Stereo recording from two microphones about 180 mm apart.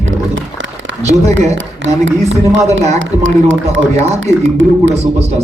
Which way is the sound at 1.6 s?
90° right.